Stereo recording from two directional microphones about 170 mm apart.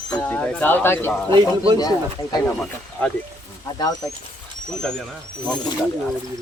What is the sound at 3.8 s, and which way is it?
Speech, 20° left (ahead or behind).